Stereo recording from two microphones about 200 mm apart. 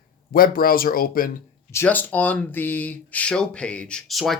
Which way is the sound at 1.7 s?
10° left (ahead or behind).